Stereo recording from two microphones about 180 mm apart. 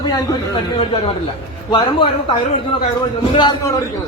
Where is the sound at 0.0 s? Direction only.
20° left (ahead or behind).